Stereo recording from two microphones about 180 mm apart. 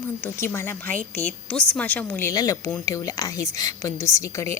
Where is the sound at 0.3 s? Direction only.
15° left (ahead or behind).